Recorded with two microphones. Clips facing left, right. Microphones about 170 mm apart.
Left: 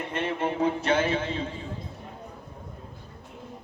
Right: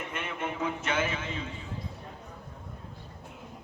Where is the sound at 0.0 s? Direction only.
30° left (ahead or behind).